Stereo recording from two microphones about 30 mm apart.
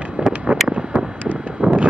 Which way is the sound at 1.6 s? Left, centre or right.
Right.